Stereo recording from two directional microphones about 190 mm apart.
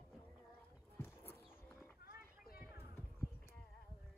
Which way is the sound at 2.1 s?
50° left (ahead or behind).